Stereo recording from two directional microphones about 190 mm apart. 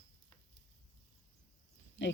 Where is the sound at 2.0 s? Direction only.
75° left (ahead or behind).